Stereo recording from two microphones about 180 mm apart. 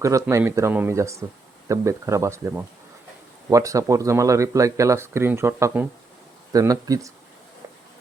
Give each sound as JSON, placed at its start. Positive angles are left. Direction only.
{"t": 0.0, "sound": "speech", "side_deg": -15}